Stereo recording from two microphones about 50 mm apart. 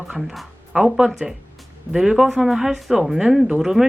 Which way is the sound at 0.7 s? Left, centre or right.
Centre.